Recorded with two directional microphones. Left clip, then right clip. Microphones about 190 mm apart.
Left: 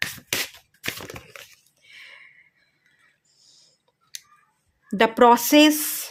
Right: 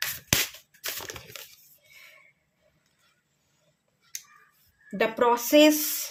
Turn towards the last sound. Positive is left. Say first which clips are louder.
# left 2 dB
turn(degrees=35)  # may be behind; listen again after turning